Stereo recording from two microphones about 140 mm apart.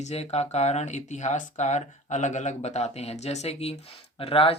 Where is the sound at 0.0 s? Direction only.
50° left (ahead or behind).